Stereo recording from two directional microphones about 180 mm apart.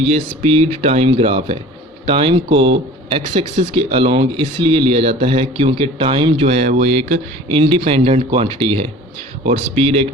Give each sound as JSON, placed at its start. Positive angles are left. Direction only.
{"t": 0.1, "sound": "speech", "side_deg": -35}